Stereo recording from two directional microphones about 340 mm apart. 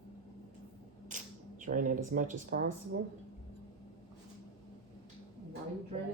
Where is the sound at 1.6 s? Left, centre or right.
Right.